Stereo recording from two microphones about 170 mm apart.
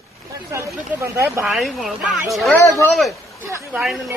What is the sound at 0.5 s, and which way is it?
Speech, 15° right (ahead or behind).